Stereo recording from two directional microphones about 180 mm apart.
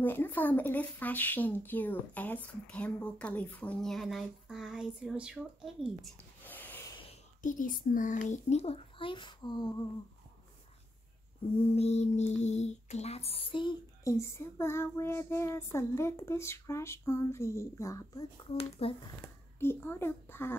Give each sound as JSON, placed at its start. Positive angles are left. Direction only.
{"t": 0.0, "sound": "speech", "side_deg": 10}
{"t": 6.4, "sound": "snort", "side_deg": 10}
{"t": 7.4, "sound": "a child's voice", "side_deg": 50}
{"t": 11.7, "sound": "a child's voice", "side_deg": 35}
{"t": 14.1, "sound": "speech", "side_deg": 15}
{"t": 18.6, "sound": "a child's voice", "side_deg": 30}
{"t": 19.2, "sound": "a child's voice", "side_deg": 15}